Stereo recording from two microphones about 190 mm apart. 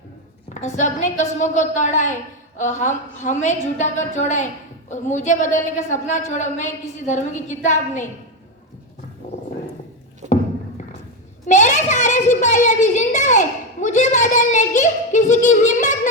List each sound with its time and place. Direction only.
0.5 s a woman's voice: 40° left (ahead or behind)
11.4 s a sound: 40° left (ahead or behind)
12.6 s a woman's voice: 40° left (ahead or behind)